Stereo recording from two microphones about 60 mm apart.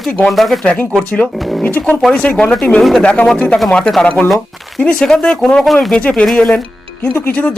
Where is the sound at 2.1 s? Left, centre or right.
Centre.